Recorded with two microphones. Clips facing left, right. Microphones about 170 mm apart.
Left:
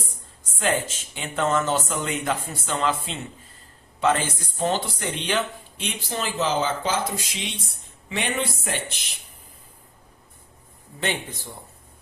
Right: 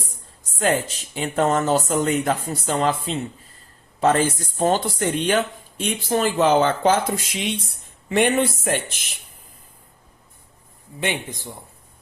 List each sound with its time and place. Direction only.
0.6 s speech: 40° right (ahead or behind)
11.0 s a man's voice: 15° right (ahead or behind)